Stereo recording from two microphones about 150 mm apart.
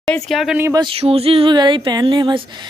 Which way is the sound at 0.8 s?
35° right (ahead or behind).